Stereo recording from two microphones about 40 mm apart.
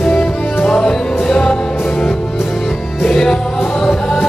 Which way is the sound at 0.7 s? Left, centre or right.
Centre.